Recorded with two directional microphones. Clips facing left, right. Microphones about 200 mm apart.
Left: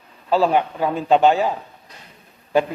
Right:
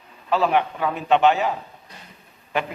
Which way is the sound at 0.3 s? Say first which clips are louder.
Left 3 dB; 30° left (ahead or behind).